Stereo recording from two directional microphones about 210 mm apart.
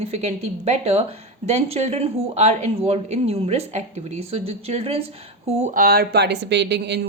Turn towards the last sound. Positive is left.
turn(degrees=-55)  # may be behind; listen again after turning